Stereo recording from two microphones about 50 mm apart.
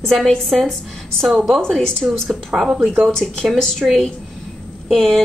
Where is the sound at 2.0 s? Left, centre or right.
Centre.